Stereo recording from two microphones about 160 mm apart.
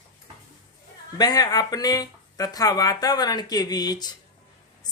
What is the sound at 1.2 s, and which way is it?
Speech, 25° left (ahead or behind).